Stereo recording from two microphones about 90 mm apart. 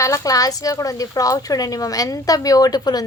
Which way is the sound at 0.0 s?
35° left (ahead or behind).